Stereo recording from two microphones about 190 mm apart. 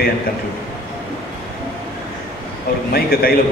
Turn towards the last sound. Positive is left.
turn(degrees=50)  # may be behind; listen again after turning